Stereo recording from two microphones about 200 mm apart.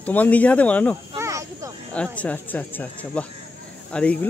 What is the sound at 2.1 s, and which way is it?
Speech, 10° left (ahead or behind).